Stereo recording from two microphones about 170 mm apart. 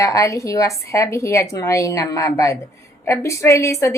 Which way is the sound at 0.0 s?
20° left (ahead or behind).